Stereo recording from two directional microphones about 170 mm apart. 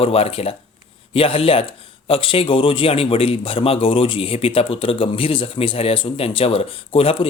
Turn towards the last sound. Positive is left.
turn(degrees=35)  # may be behind; listen again after turning